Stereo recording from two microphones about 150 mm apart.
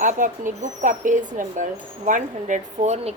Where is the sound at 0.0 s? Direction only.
55° right (ahead or behind).